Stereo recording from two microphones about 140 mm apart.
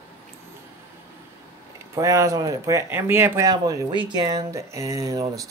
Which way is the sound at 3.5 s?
30° right (ahead or behind).